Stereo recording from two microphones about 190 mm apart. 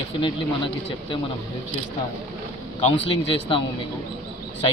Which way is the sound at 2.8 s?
30° left (ahead or behind).